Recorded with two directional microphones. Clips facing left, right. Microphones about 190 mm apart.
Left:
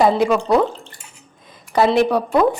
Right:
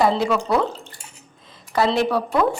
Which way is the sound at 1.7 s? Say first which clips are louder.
Left 4 dB; 20° left (ahead or behind).